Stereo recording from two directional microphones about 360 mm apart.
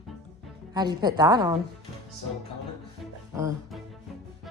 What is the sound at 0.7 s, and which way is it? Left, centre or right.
Speech, centre.